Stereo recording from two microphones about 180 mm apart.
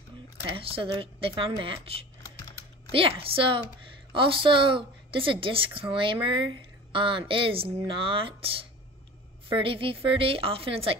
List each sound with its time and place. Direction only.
0.6 s a woman's voice: 30° right (ahead or behind)